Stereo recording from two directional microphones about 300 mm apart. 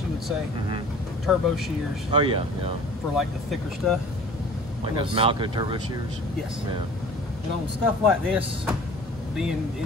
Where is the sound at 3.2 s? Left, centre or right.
Centre.